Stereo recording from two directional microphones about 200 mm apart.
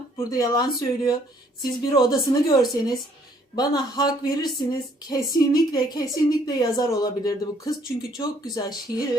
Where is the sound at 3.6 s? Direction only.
20° left (ahead or behind).